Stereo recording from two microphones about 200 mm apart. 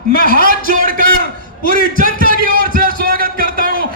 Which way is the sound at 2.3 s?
45° right (ahead or behind).